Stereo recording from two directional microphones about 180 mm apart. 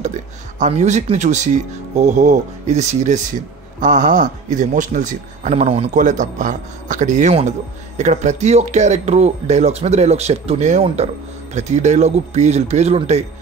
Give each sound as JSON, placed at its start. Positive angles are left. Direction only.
{"t": 0.0, "sound": "speech", "side_deg": -40}